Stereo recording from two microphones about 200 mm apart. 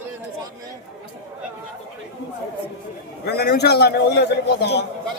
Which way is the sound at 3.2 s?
55° left (ahead or behind).